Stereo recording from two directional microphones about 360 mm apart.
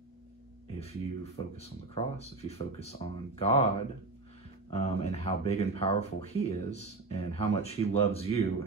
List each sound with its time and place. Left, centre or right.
0.7 s speech: centre
4.6 s speech: centre